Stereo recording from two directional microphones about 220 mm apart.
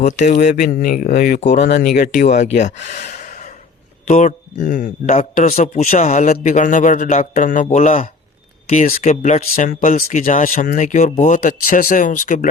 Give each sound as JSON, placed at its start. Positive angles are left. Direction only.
{"t": 0.0, "sound": "speech", "side_deg": 35}